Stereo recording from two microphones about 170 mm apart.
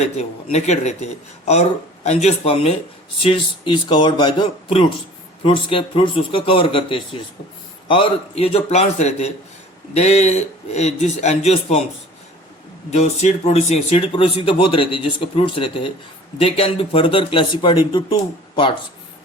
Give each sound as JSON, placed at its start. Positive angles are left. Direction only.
{"t": 0.0, "sound": "speech", "side_deg": 40}
{"t": 12.9, "sound": "speech", "side_deg": 40}